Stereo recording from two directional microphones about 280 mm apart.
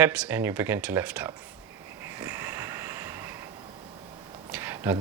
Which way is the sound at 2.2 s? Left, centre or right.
Centre.